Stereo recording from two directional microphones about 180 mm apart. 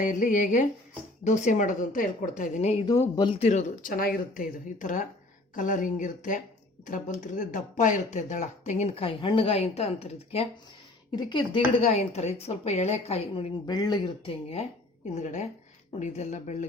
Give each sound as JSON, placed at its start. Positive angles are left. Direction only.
{"t": 0.0, "sound": "a woman's voice", "side_deg": 45}
{"t": 2.8, "sound": "speech", "side_deg": 20}
{"t": 3.4, "sound": "a woman's voice", "side_deg": 40}
{"t": 11.1, "sound": "speech", "side_deg": 25}
{"t": 13.7, "sound": "speech", "side_deg": 20}
{"t": 15.1, "sound": "speech", "side_deg": 40}